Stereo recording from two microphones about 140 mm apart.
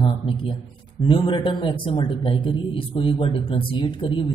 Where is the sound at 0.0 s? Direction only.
35° left (ahead or behind).